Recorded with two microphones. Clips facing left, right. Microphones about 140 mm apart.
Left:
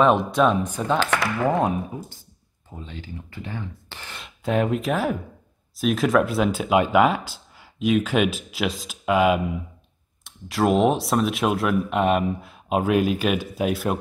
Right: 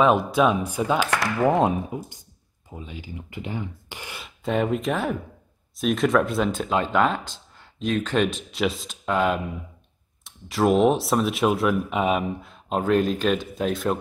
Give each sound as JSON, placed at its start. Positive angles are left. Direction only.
{"t": 0.0, "sound": "speech", "side_deg": -5}
{"t": 4.2, "sound": "speech", "side_deg": 0}